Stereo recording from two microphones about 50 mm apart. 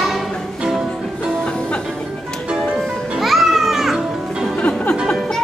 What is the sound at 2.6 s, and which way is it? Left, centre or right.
Music, centre.